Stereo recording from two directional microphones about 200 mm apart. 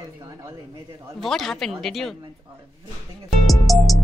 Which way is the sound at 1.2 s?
Centre (ahead or behind).